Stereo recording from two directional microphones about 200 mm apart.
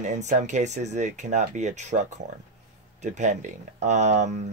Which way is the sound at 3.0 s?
35° right (ahead or behind).